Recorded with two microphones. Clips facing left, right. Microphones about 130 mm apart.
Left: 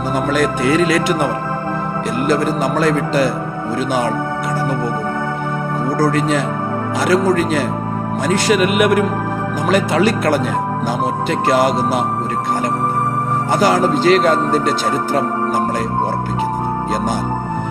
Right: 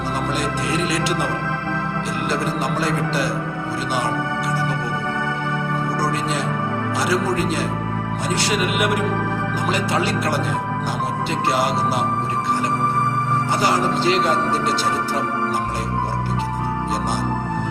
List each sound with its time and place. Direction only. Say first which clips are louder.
0.3 s speech: left 8 dB; 60° left (ahead or behind)
6.0 s speech: left 7 dB; 50° left (ahead or behind)
13.5 s speech: left 7 dB; 50° left (ahead or behind)